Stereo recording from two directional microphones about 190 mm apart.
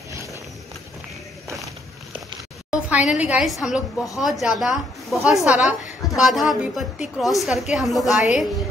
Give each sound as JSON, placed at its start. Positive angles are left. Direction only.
{"t": 0.1, "sound": "run", "side_deg": -15}
{"t": 2.7, "sound": "a sound", "side_deg": -5}
{"t": 3.2, "sound": "a woman's voice", "side_deg": -5}